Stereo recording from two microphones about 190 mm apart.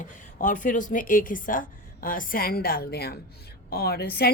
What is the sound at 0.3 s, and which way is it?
A woman's voice, 45° left (ahead or behind).